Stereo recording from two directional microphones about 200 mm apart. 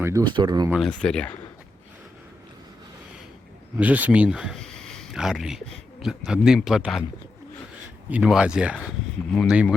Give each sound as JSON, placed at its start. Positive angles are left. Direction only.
{"t": 0.0, "sound": "a sound", "side_deg": -15}
{"t": 0.3, "sound": "speech", "side_deg": -20}
{"t": 0.7, "sound": "speech", "side_deg": 0}
{"t": 3.8, "sound": "speech", "side_deg": -10}
{"t": 8.1, "sound": "speech", "side_deg": -5}